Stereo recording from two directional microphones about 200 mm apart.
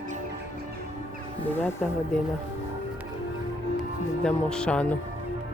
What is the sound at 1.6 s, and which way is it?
Speech, 10° left (ahead or behind).